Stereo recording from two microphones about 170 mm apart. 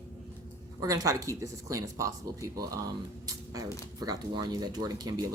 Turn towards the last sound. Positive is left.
turn(degrees=-20)  # may be behind; listen again after turning